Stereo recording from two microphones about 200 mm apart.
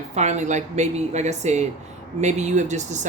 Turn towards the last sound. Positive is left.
turn(degrees=-35)  # may be behind; listen again after turning